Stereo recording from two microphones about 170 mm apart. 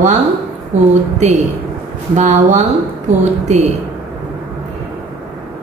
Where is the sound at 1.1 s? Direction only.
45° right (ahead or behind).